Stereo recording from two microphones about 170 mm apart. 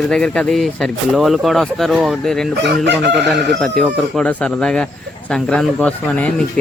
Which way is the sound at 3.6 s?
5° left (ahead or behind).